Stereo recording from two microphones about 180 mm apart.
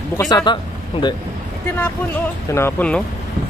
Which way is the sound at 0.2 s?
20° left (ahead or behind).